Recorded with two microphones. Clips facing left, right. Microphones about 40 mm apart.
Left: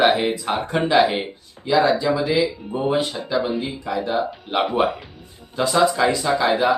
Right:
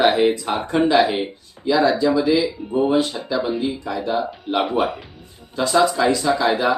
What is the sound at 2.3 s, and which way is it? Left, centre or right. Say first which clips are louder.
Speech: right 2 dB; centre.